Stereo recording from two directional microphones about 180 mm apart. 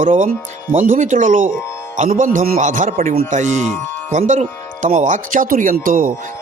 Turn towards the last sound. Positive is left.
turn(degrees=-50)  # may be behind; listen again after turning